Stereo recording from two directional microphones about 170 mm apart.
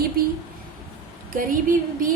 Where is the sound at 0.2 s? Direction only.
60° right (ahead or behind).